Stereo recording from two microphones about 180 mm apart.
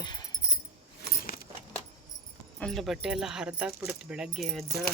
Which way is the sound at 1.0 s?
55° left (ahead or behind).